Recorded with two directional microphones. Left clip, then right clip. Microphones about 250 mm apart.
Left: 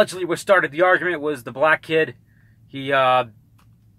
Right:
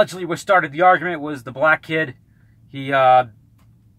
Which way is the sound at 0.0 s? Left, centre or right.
Centre.